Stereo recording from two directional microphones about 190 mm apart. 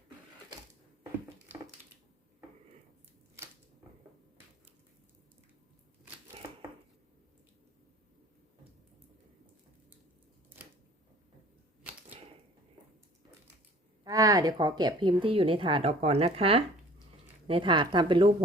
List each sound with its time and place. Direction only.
14.0 s a woman's voice: 20° right (ahead or behind)